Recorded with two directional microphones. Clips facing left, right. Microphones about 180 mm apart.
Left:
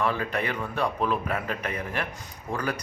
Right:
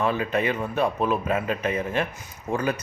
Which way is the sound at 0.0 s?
20° right (ahead or behind).